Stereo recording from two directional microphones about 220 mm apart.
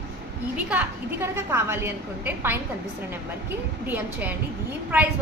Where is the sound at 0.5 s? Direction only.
5° right (ahead or behind).